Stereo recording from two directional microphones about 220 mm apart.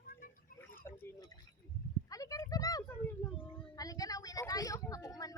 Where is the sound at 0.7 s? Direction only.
10° left (ahead or behind).